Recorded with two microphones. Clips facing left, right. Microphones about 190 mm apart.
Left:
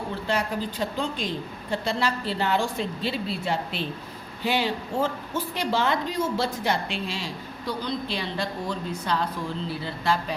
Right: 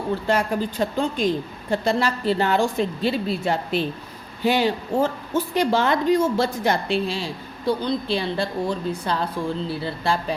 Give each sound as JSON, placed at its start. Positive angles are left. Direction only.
{"t": 0.3, "sound": "a woman's voice", "side_deg": -45}